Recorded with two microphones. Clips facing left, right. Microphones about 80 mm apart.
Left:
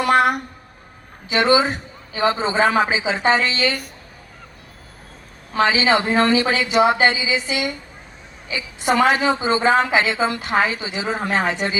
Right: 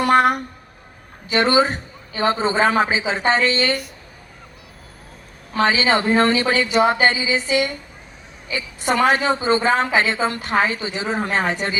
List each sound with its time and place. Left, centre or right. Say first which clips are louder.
0.0 s a woman's voice: right 1 dB; right
5.5 s a woman's voice: left 1 dB; right